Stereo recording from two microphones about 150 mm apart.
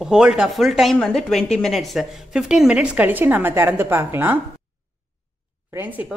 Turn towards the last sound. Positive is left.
turn(degrees=-10)  # may be behind; listen again after turning